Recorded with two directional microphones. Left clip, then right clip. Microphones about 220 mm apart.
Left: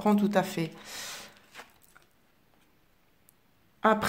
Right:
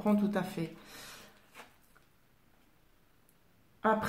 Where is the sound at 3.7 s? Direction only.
45° left (ahead or behind).